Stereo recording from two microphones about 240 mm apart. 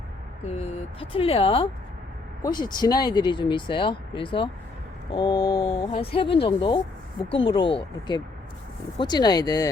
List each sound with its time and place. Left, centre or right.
0.4 s speech: left
5.4 s mantra: left
5.8 s speech: left